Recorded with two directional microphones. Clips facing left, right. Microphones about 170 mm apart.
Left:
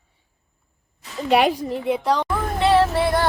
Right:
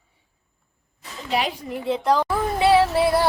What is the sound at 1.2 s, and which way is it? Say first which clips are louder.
Speech: left 7 dB; 60° left (ahead or behind).